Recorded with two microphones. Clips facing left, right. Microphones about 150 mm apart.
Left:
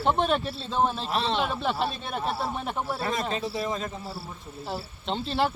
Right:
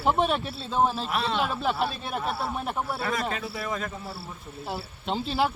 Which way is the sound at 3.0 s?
25° left (ahead or behind).